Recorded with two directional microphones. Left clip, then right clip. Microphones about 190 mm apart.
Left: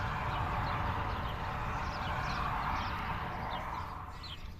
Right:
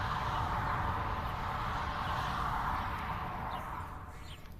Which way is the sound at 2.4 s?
35° left (ahead or behind).